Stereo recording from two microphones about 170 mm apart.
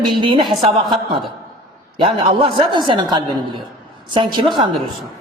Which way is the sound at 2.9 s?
25° right (ahead or behind).